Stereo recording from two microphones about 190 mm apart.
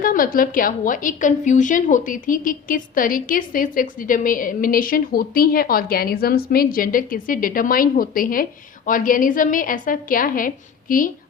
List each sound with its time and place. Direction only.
0.0 s a woman's voice: 45° left (ahead or behind)